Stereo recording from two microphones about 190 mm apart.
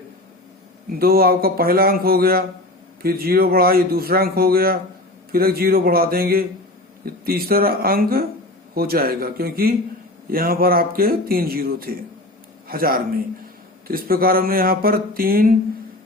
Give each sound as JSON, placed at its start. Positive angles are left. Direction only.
{"t": 0.9, "sound": "speech", "side_deg": -50}